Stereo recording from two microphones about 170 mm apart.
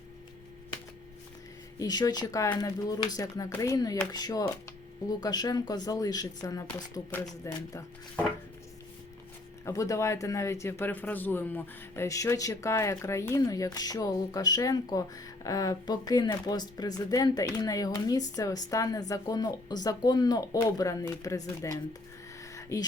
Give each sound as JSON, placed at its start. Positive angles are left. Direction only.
{"t": 1.8, "sound": "speech", "side_deg": 25}
{"t": 9.6, "sound": "speech", "side_deg": 20}